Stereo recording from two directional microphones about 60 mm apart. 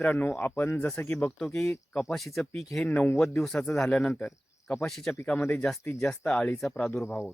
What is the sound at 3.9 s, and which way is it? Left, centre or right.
Speech, centre.